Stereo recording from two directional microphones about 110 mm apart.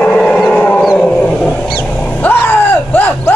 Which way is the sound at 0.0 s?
10° left (ahead or behind).